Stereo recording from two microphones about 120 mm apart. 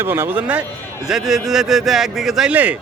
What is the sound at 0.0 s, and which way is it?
A man's voice, 20° right (ahead or behind).